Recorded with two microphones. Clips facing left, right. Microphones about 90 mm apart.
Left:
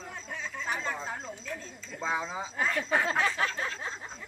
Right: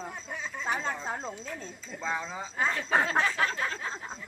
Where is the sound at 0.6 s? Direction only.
30° right (ahead or behind).